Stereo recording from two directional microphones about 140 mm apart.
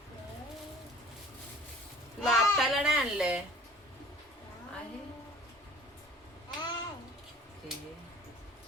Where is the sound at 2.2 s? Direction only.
Centre (ahead or behind).